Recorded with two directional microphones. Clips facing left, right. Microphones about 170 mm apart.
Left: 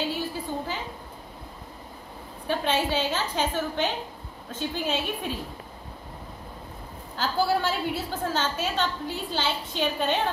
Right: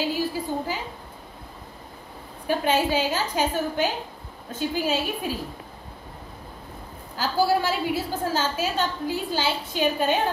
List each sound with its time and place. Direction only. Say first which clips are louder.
0.0 s a woman's voice: right 4 dB; 10° right (ahead or behind)
2.4 s a woman's voice: right 3 dB; 10° right (ahead or behind)
7.2 s a woman's voice: right 3 dB; 5° right (ahead or behind)